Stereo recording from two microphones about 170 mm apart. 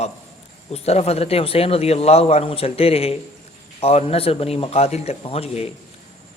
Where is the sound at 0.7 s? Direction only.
40° left (ahead or behind).